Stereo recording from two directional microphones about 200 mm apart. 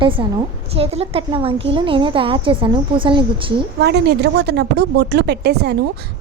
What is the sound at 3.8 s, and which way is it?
Speech, 55° right (ahead or behind).